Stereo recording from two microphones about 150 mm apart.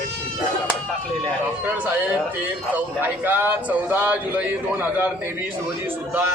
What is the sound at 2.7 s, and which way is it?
Speech, 15° right (ahead or behind).